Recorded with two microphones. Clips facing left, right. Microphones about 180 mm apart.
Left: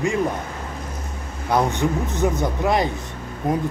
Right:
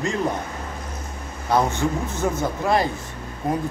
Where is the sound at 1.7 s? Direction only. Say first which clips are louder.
Left 2 dB; 15° left (ahead or behind).